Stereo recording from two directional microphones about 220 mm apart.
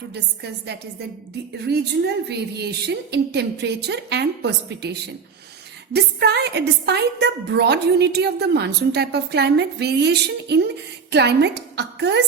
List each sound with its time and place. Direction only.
0.1 s a woman's voice: 50° right (ahead or behind)